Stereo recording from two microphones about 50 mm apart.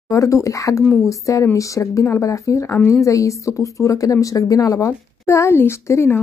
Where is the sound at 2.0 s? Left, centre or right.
Left.